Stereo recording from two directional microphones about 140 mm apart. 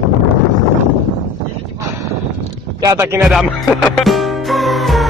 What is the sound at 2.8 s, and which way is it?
Speech, 20° right (ahead or behind).